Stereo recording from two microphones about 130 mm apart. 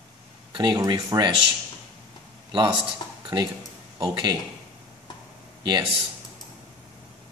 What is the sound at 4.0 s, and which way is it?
Speech, 35° right (ahead or behind).